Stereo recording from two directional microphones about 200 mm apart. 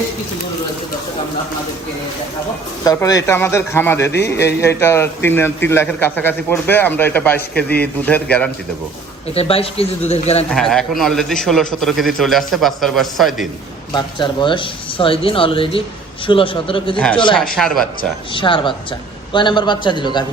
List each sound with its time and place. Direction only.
2.8 s a man's voice: 15° left (ahead or behind)
9.3 s a man's voice: 30° left (ahead or behind)
10.5 s a man's voice: centre (ahead or behind)
13.9 s speech: 20° left (ahead or behind)
17.6 s a man's voice: centre (ahead or behind)
18.3 s speech: 25° left (ahead or behind)